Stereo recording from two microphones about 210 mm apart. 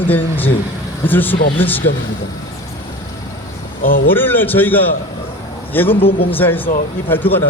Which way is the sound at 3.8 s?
40° left (ahead or behind).